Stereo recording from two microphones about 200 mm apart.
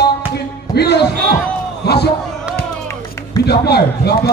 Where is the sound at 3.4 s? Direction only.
55° left (ahead or behind).